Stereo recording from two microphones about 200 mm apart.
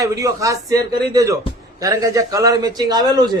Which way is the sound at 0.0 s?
15° right (ahead or behind).